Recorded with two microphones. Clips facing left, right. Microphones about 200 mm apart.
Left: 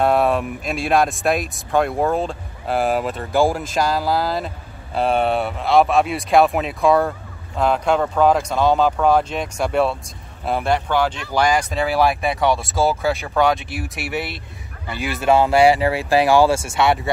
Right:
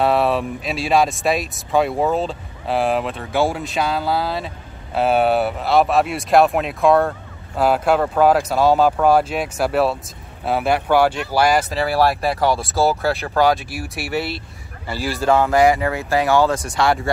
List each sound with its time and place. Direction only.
0.0 s a sound: centre (ahead or behind)
0.8 s speech: centre (ahead or behind)
15.0 s speech: 20° left (ahead or behind)
15.8 s speech: 15° left (ahead or behind)
16.8 s speech: centre (ahead or behind)